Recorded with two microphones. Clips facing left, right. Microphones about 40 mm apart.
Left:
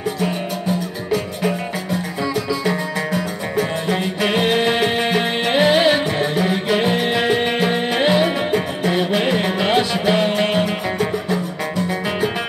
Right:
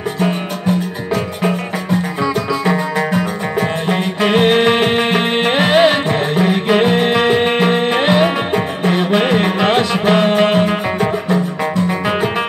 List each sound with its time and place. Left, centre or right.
0.2 s music: right